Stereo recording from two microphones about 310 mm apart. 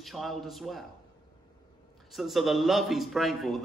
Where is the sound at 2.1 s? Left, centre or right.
Centre.